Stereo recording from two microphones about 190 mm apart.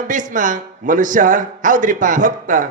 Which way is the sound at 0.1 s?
45° right (ahead or behind).